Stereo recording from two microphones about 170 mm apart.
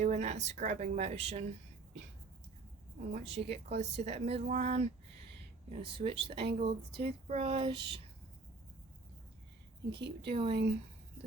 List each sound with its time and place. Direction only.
0.0 s speech: 45° right (ahead or behind)
3.1 s speech: 40° right (ahead or behind)
10.2 s speech: 35° right (ahead or behind)